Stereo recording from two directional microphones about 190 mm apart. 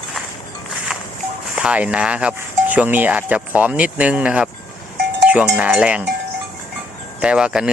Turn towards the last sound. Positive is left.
turn(degrees=-5)  # may be behind; listen again after turning